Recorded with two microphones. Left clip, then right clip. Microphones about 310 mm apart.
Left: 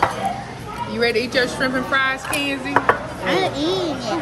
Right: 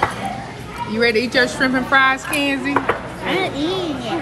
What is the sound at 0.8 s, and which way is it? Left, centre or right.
A woman's voice, centre.